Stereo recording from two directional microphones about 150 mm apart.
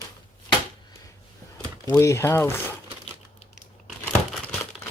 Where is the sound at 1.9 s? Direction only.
20° left (ahead or behind).